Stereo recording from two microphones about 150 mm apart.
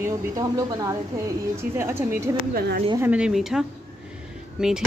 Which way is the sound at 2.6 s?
90° right.